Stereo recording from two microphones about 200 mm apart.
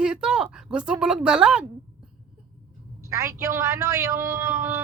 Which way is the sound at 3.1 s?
15° right (ahead or behind).